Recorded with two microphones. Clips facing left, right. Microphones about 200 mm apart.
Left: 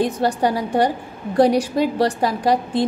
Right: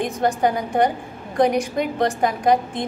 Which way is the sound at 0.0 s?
35° left (ahead or behind).